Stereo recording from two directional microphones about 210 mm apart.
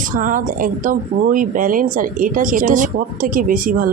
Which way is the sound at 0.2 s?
40° right (ahead or behind).